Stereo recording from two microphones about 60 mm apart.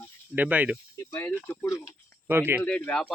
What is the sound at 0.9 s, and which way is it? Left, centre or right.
Speech, left.